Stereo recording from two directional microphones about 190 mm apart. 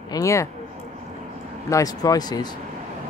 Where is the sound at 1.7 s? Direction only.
20° left (ahead or behind).